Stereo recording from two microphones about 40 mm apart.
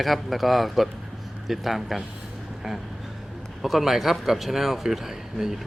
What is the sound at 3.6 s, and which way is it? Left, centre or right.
Speech, centre.